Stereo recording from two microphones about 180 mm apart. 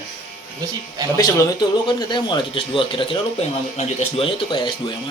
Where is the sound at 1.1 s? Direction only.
20° left (ahead or behind).